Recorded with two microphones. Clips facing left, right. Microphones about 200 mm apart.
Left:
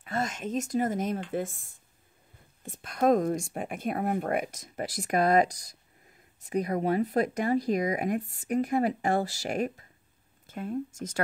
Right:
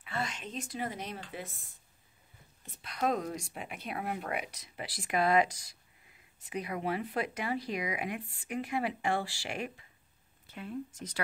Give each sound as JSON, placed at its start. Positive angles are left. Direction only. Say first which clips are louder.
{"t": 0.0, "sound": "speech", "louder": "left 6 dB", "side_deg": 45}